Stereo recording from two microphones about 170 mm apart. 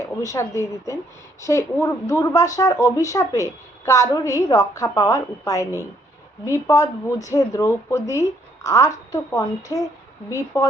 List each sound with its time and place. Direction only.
0.0 s speech: 20° left (ahead or behind)